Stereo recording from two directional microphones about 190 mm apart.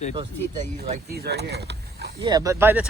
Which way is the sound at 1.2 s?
60° right (ahead or behind).